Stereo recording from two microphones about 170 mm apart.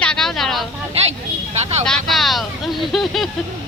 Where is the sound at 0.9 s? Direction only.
35° right (ahead or behind).